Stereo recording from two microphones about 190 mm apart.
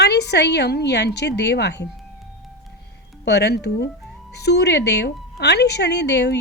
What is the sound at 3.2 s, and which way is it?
A woman's voice, 60° left (ahead or behind).